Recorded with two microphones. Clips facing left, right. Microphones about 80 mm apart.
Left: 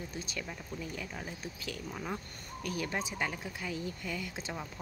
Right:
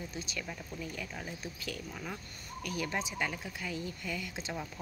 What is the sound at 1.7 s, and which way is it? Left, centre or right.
Speech, left.